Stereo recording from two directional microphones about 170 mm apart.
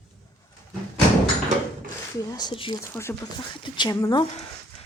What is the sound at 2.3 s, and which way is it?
Speech, 25° left (ahead or behind).